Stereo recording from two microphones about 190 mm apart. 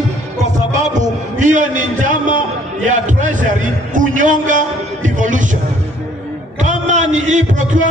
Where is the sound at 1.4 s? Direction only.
40° right (ahead or behind).